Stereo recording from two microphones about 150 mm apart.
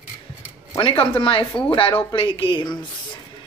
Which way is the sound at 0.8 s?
35° left (ahead or behind).